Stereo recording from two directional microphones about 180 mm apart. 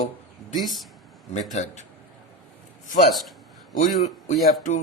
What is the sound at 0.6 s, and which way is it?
Speech, centre (ahead or behind).